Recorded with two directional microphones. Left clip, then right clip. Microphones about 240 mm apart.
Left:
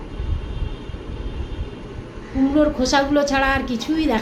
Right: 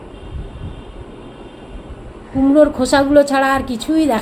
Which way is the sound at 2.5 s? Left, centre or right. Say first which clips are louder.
Right 6 dB; centre.